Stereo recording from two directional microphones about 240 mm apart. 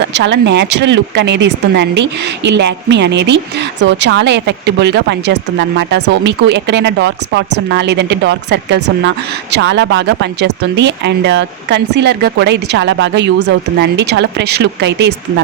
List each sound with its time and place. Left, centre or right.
0.0 s a woman's voice: right